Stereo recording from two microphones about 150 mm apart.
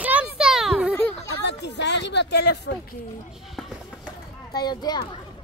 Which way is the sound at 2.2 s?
90° left.